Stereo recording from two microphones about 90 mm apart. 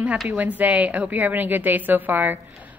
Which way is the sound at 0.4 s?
15° right (ahead or behind).